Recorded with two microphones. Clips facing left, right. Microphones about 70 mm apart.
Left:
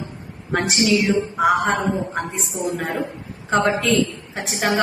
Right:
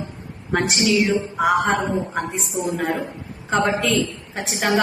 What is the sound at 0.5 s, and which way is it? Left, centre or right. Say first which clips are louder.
A man's voice: even; centre.